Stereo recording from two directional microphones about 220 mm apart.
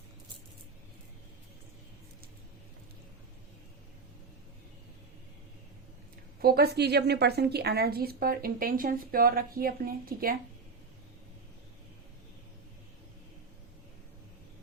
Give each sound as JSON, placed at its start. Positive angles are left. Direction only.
{"t": 6.4, "sound": "a woman's voice", "side_deg": -45}